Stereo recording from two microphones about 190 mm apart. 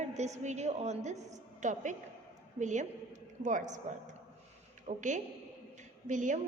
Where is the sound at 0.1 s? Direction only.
35° right (ahead or behind).